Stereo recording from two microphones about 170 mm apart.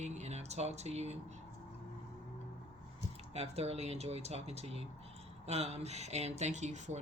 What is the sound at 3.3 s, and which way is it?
Speech, 40° right (ahead or behind).